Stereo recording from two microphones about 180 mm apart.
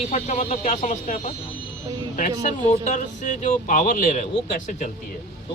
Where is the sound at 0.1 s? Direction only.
40° left (ahead or behind).